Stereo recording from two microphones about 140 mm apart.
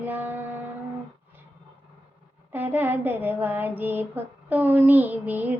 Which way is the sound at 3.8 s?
15° right (ahead or behind).